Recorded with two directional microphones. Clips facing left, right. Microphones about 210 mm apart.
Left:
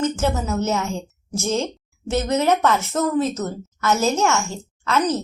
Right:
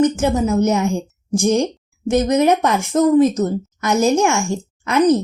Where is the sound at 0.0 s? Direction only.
15° right (ahead or behind).